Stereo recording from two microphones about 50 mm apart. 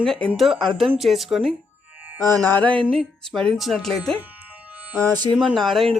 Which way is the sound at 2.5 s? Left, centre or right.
Left.